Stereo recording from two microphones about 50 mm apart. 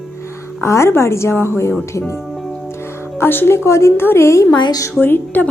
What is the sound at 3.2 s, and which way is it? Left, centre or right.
A woman's voice, left.